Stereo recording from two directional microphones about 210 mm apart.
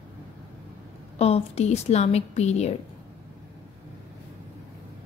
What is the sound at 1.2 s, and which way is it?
A woman's voice, 30° left (ahead or behind).